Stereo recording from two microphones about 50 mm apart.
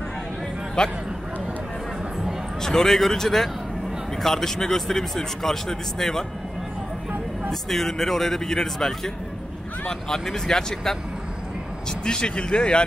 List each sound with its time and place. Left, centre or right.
0.8 s speech: centre
2.6 s speech: centre
7.7 s speech: centre
12.0 s speech: centre